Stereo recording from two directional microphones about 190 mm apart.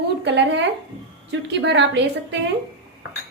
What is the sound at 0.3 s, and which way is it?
A woman's voice, 70° right (ahead or behind).